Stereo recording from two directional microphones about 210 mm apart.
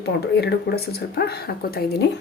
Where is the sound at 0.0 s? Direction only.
50° left (ahead or behind).